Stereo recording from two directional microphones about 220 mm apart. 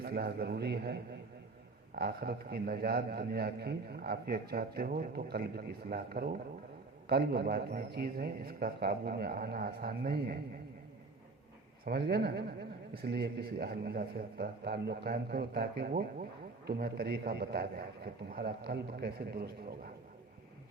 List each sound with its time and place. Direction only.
0.0 s a man's voice: 45° right (ahead or behind)
2.0 s a man's voice: 45° right (ahead or behind)
11.9 s a man's voice: 45° right (ahead or behind)